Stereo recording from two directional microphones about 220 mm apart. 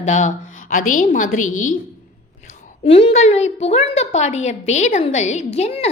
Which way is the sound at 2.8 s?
25° left (ahead or behind).